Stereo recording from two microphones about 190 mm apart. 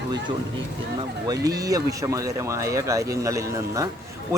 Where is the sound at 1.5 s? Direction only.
20° right (ahead or behind).